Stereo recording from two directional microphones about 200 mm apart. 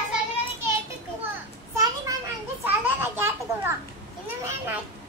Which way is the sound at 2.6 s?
10° right (ahead or behind).